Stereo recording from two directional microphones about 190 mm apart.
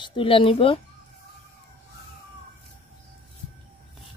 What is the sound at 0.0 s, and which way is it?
Speech, 25° left (ahead or behind).